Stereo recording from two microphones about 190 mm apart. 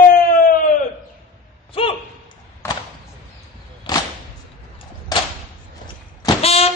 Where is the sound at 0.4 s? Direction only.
45° left (ahead or behind).